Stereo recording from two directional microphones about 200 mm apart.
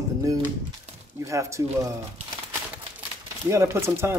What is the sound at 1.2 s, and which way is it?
Speech, 15° right (ahead or behind).